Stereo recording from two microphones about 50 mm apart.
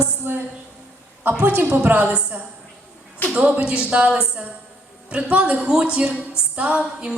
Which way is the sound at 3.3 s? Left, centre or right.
Right.